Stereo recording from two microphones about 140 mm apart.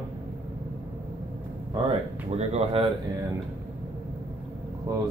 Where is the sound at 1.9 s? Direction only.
50° right (ahead or behind).